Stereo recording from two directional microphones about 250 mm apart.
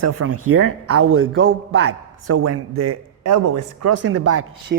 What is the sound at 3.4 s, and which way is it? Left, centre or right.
Speech, right.